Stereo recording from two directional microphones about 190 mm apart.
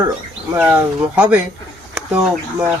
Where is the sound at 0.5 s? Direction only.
5° right (ahead or behind).